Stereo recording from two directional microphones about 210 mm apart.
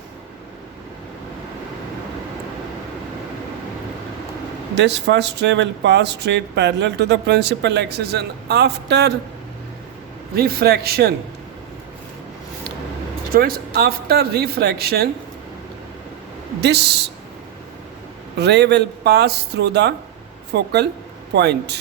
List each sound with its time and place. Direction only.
4.7 s speech: 55° right (ahead or behind)
10.3 s speech: 45° right (ahead or behind)
13.3 s speech: 45° right (ahead or behind)
16.6 s speech: 55° right (ahead or behind)
18.3 s speech: 55° right (ahead or behind)